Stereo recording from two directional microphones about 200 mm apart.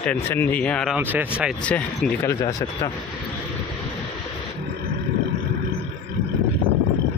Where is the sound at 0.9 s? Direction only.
10° right (ahead or behind).